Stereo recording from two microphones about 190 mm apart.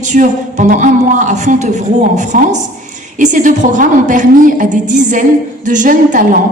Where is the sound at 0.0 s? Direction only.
40° right (ahead or behind).